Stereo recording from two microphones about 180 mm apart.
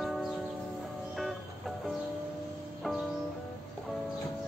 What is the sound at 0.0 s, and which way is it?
Church bell, centre (ahead or behind).